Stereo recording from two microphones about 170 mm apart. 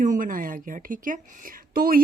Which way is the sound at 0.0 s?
50° right (ahead or behind).